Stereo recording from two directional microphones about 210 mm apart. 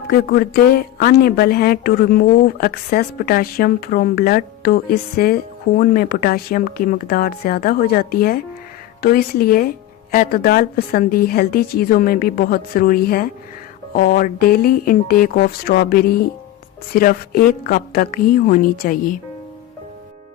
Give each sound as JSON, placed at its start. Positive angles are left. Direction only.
{"t": 0.1, "sound": "a woman's voice", "side_deg": 45}